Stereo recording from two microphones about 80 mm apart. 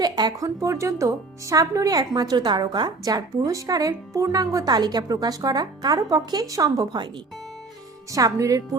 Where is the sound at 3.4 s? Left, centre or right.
Right.